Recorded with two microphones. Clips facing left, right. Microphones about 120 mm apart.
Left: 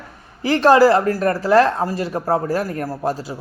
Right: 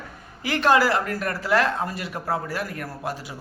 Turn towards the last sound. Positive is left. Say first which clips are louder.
# left 8 dB
turn(degrees=35)  # may be behind; listen again after turning